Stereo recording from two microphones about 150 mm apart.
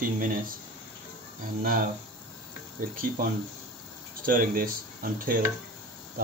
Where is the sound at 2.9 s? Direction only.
70° right (ahead or behind).